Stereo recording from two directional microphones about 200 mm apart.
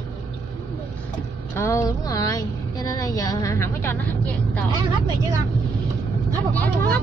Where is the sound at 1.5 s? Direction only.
15° left (ahead or behind).